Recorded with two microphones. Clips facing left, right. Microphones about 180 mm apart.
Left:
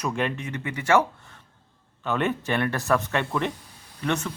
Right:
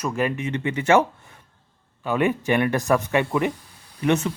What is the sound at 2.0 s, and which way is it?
A man's voice, 10° right (ahead or behind).